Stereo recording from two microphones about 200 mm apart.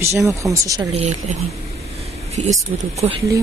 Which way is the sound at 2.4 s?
35° right (ahead or behind).